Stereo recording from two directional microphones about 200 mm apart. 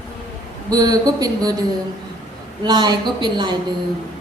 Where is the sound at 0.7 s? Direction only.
20° right (ahead or behind).